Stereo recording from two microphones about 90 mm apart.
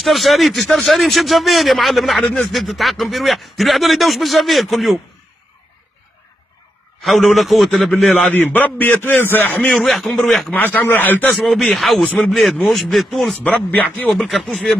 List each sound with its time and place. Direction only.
0.0 s speech: centre (ahead or behind)
7.0 s speech: centre (ahead or behind)
8.3 s a man's voice: 20° left (ahead or behind)
9.8 s speech: centre (ahead or behind)
10.5 s a man's voice: 20° left (ahead or behind)
11.2 s speech: centre (ahead or behind)
13.4 s a man's voice: 20° left (ahead or behind)
14.2 s speech: 5° left (ahead or behind)